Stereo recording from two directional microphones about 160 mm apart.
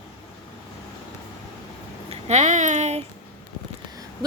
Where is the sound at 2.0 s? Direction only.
45° right (ahead or behind).